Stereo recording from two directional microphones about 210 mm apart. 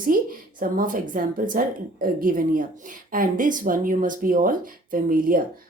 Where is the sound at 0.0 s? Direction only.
40° right (ahead or behind).